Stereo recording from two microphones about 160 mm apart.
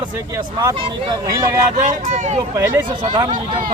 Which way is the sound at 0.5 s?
25° right (ahead or behind).